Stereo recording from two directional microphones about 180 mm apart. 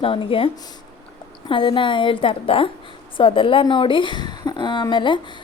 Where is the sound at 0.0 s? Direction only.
30° left (ahead or behind).